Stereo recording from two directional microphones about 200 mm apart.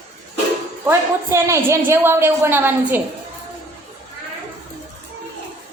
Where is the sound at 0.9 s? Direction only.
15° right (ahead or behind).